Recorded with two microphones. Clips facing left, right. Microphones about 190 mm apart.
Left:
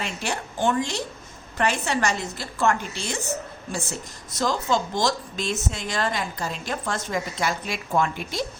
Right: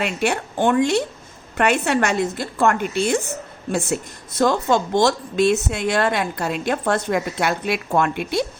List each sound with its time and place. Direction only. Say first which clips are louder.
0.0 s speech: right 8 dB; 65° right (ahead or behind)